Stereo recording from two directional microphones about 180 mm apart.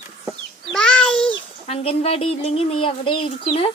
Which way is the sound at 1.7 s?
35° left (ahead or behind).